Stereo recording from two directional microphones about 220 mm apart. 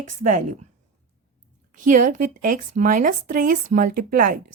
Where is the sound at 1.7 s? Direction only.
35° right (ahead or behind).